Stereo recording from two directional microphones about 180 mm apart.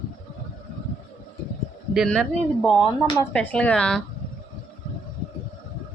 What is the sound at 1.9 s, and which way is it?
Speech, centre (ahead or behind).